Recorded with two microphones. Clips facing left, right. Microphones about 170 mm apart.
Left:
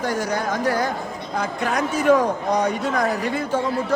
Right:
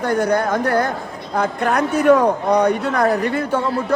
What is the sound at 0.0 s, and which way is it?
A man's voice, 55° right (ahead or behind).